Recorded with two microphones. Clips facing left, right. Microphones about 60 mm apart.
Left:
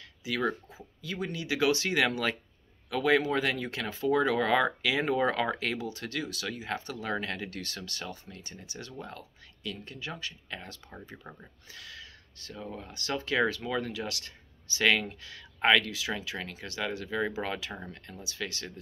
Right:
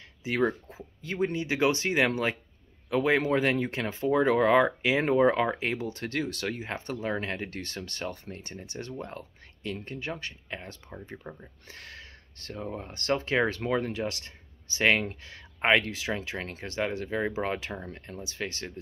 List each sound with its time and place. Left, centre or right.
0.2 s speech: right
5.9 s speech: right
6.7 s speech: right
11.3 s speech: centre
11.6 s speech: right